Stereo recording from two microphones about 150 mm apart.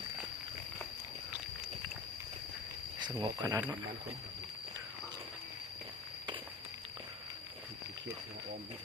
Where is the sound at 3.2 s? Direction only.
25° right (ahead or behind).